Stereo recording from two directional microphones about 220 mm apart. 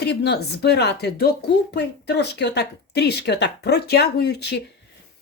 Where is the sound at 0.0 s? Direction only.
50° left (ahead or behind).